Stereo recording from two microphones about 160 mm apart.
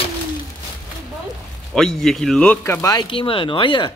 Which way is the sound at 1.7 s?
5° left (ahead or behind).